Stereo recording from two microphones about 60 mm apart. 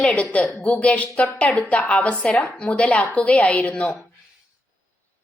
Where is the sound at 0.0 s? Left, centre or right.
Left.